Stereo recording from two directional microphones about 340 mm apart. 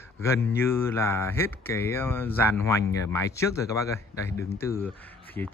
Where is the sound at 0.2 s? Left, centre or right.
Centre.